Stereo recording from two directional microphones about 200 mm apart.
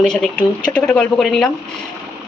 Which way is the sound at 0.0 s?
5° left (ahead or behind).